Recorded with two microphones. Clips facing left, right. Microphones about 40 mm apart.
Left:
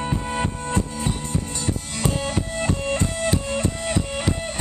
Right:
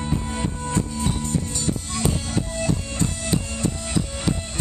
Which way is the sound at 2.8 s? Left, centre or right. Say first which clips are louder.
Left 4 dB; left.